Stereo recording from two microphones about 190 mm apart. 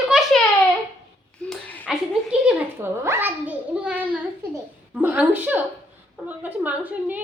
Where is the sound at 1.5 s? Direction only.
5° left (ahead or behind).